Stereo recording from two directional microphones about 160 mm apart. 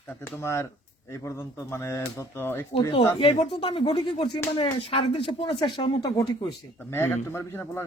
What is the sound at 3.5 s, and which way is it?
Speech, 35° left (ahead or behind).